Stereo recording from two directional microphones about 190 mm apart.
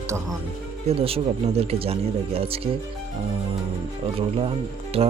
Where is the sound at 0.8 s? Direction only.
30° right (ahead or behind).